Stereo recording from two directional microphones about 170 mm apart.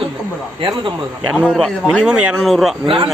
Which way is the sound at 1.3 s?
5° left (ahead or behind).